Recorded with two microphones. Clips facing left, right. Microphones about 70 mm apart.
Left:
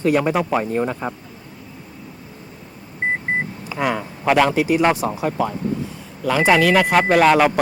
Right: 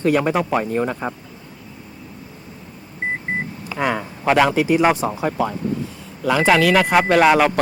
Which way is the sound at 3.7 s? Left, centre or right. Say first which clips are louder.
Even; centre.